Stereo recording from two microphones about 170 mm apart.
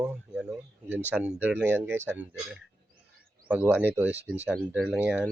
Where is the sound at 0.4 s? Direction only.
10° right (ahead or behind).